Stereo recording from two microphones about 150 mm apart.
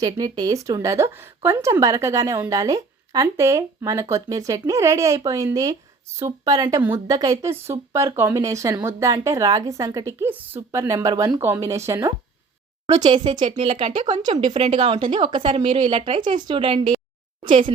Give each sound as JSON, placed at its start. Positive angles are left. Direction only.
{"t": 0.0, "sound": "a woman's voice", "side_deg": -25}
{"t": 11.3, "sound": "a woman's voice", "side_deg": -15}
{"t": 13.1, "sound": "speech", "side_deg": -30}
{"t": 14.2, "sound": "a woman's voice", "side_deg": -55}